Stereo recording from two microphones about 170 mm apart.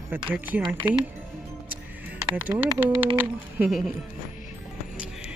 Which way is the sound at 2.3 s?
10° right (ahead or behind).